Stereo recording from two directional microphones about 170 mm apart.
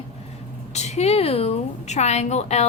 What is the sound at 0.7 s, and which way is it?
A woman's voice, 40° left (ahead or behind).